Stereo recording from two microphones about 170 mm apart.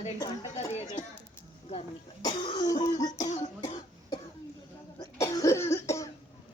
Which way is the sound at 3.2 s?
45° left (ahead or behind).